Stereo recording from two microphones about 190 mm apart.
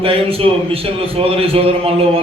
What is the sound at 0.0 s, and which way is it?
A man's voice, 30° right (ahead or behind).